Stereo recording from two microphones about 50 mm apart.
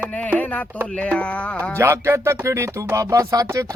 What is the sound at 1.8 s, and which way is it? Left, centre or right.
Music, right.